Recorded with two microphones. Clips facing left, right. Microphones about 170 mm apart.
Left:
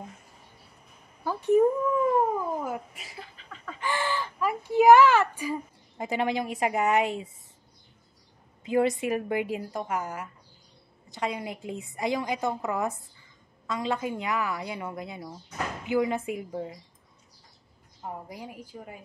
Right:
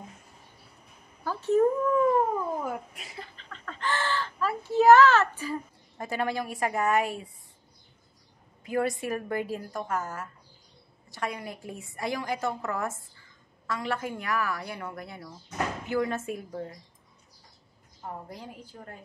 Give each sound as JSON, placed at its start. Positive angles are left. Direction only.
{"t": 1.2, "sound": "a child's voice", "side_deg": 15}
{"t": 2.3, "sound": "cat", "side_deg": 5}
{"t": 8.6, "sound": "a woman's voice", "side_deg": 20}
{"t": 18.0, "sound": "a woman's voice", "side_deg": 10}